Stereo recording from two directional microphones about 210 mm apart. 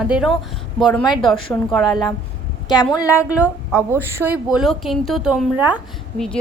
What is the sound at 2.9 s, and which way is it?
Speech, 15° left (ahead or behind).